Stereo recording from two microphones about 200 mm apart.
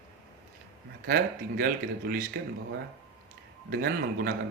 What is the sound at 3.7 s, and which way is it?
Speech, 50° right (ahead or behind).